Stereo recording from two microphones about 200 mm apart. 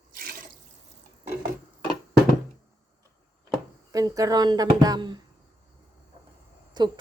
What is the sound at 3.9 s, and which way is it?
A woman's voice, 15° right (ahead or behind).